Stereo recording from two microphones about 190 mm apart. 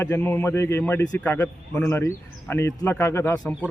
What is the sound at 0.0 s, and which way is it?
Speech, 10° left (ahead or behind).